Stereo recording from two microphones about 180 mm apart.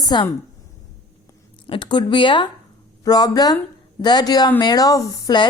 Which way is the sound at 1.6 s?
25° left (ahead or behind).